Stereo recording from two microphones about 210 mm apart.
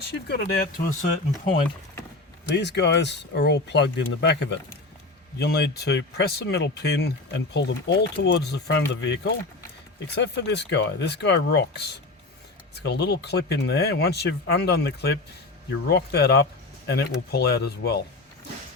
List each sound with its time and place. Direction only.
0.1 s speech: 50° left (ahead or behind)
2.5 s speech: 55° left (ahead or behind)